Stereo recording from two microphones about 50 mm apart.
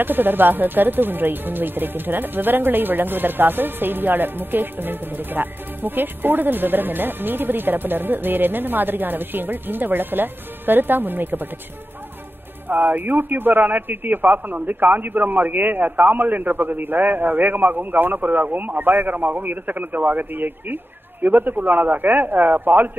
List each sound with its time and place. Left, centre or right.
0.0 s speech: right
12.6 s speech: right